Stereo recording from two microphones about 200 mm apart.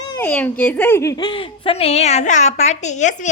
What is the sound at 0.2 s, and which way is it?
A woman's voice, 10° left (ahead or behind).